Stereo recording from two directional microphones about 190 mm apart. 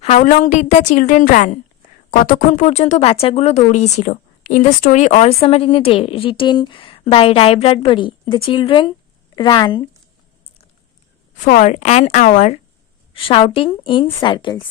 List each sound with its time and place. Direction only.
0.0 s a woman's voice: 35° left (ahead or behind)
11.3 s speech: 45° left (ahead or behind)
13.1 s a woman's voice: 30° left (ahead or behind)